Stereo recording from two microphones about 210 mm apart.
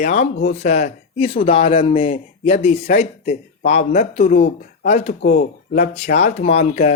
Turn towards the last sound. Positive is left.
turn(degrees=30)  # may be behind; listen again after turning